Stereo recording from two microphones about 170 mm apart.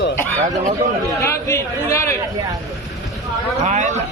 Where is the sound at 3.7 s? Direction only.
45° right (ahead or behind).